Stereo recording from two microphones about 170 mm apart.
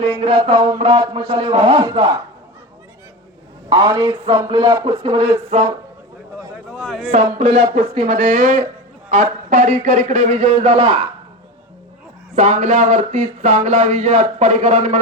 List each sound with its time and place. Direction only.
0.2 s music: 35° right (ahead or behind)
1.1 s speech: 30° right (ahead or behind)
3.7 s speech: 25° right (ahead or behind)
5.5 s music: 40° right (ahead or behind)
6.8 s a man's voice: centre (ahead or behind)
7.1 s music: 35° right (ahead or behind)
8.2 s speech: 50° right (ahead or behind)
12.4 s speech: 45° right (ahead or behind)